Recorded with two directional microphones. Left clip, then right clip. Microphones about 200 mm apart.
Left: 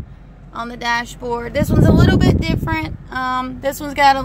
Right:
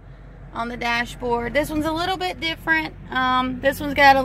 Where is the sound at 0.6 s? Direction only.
5° left (ahead or behind).